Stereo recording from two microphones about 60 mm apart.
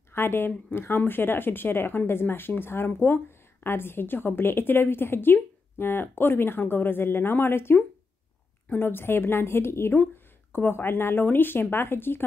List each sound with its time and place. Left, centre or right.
0.1 s speech: left